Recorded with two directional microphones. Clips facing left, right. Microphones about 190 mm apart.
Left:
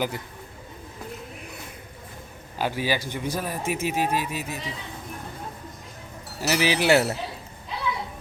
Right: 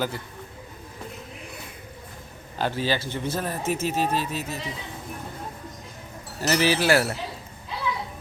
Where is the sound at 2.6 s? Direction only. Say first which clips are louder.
Even; 10° left (ahead or behind).